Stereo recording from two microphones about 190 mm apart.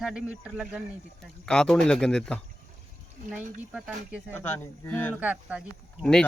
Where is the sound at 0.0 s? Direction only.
5° right (ahead or behind).